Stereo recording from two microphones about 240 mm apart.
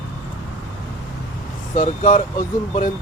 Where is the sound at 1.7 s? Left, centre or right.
Left.